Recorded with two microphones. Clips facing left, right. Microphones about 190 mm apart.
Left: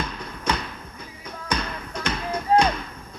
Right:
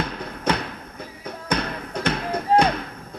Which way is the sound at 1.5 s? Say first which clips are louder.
Right 3 dB; 60° right (ahead or behind).